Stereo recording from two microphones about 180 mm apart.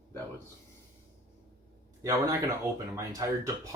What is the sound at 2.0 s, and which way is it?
Speech, 20° right (ahead or behind).